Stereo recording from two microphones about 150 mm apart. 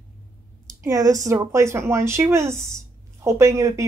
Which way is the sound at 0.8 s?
25° right (ahead or behind).